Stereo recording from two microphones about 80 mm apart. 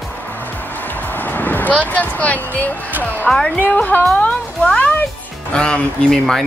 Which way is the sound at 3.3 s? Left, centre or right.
Centre.